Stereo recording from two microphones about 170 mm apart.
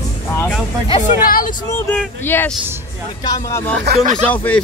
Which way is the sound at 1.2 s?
55° left (ahead or behind).